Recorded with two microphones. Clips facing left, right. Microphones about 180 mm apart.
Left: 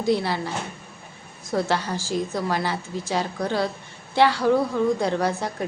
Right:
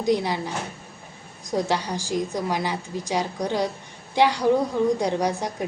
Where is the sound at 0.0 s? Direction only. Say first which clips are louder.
Even; 15° right (ahead or behind).